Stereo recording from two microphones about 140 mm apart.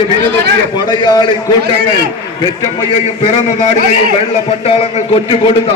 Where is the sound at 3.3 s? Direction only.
45° left (ahead or behind).